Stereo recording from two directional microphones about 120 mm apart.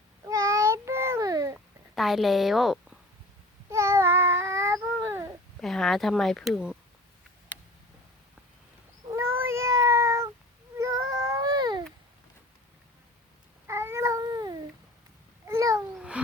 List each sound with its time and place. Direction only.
0.3 s babbling: 30° right (ahead or behind)
2.0 s a woman's voice: centre (ahead or behind)
3.7 s cat: 25° right (ahead or behind)
5.5 s speech: centre (ahead or behind)
9.1 s meow: 20° right (ahead or behind)
10.8 s baby cry: 30° right (ahead or behind)
13.7 s cat: 20° right (ahead or behind)
15.4 s babbling: 25° right (ahead or behind)
16.0 s babbling: 10° right (ahead or behind)